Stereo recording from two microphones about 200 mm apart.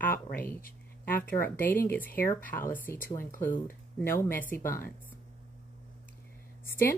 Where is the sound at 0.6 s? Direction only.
45° left (ahead or behind).